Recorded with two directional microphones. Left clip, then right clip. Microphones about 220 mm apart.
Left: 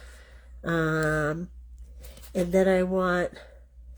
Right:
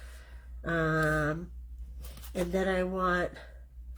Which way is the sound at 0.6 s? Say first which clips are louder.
Left 3 dB; 45° left (ahead or behind).